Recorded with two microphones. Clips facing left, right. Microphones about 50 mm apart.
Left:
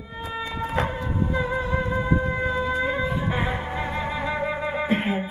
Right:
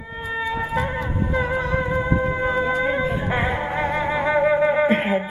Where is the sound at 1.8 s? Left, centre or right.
Right.